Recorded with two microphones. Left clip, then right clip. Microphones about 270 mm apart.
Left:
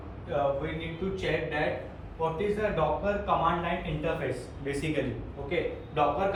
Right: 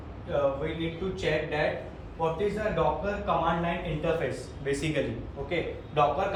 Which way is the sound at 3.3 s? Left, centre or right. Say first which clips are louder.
Right 1 dB; centre.